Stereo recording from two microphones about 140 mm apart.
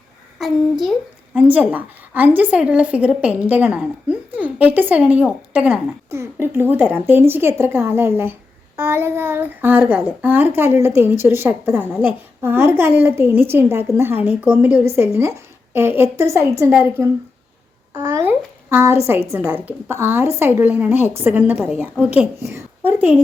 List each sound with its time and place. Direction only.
0.3 s a child's voice: centre (ahead or behind)
1.4 s a woman's voice: 10° right (ahead or behind)